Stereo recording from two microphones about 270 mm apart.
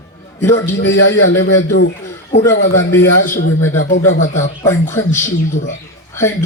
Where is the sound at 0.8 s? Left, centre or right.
Left.